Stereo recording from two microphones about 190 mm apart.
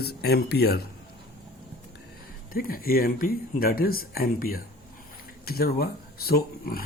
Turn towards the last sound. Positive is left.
turn(degrees=50)  # may be behind; listen again after turning